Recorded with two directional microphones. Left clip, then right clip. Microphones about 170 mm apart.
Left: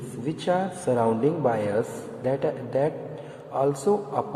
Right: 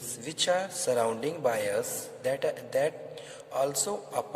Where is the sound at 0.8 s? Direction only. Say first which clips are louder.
Left 6 dB; 50° right (ahead or behind).